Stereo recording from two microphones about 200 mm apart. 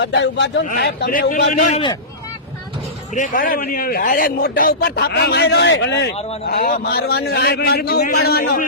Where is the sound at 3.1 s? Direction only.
40° left (ahead or behind).